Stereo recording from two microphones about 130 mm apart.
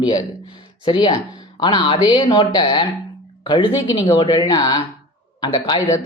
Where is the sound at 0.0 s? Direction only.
30° left (ahead or behind).